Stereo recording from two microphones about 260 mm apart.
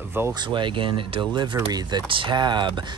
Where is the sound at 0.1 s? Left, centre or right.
Centre.